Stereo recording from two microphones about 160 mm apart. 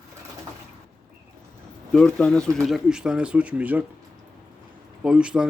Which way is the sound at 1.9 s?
5° left (ahead or behind).